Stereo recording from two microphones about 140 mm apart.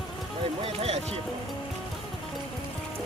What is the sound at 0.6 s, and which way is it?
Speech, 45° right (ahead or behind).